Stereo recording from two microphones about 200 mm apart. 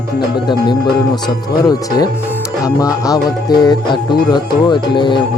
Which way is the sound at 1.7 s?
20° left (ahead or behind).